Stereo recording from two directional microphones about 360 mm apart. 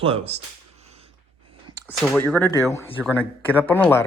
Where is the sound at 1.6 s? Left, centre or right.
Centre.